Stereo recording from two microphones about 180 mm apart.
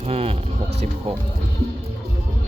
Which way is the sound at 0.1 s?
35° right (ahead or behind).